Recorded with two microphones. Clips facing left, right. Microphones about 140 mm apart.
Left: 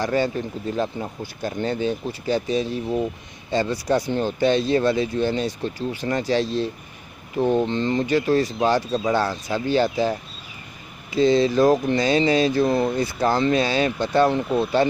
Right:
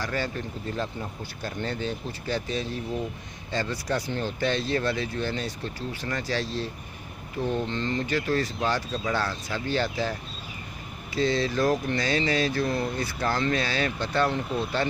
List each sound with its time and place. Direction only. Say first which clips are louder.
0.0 s speech: left 8 dB; 20° left (ahead or behind)
11.1 s speech: left 8 dB; 20° left (ahead or behind)